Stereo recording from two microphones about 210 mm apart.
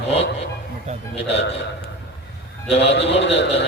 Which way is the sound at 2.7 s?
55° left (ahead or behind).